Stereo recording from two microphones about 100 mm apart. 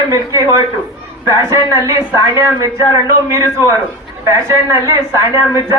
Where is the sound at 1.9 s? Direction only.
30° right (ahead or behind).